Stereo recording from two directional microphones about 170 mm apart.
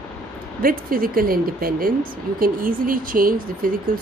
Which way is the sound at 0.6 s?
55° right (ahead or behind).